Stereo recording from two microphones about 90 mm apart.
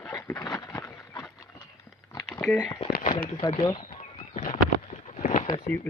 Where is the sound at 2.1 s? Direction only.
50° left (ahead or behind).